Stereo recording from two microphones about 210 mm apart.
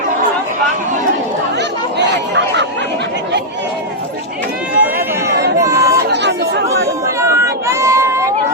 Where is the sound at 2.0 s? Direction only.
55° right (ahead or behind).